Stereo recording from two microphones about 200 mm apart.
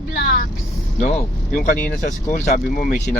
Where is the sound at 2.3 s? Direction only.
40° left (ahead or behind).